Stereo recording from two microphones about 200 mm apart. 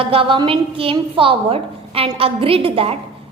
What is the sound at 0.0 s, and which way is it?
A woman's voice, 25° right (ahead or behind).